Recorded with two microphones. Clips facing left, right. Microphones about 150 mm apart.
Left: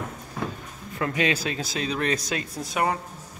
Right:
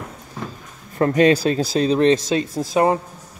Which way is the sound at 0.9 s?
40° right (ahead or behind).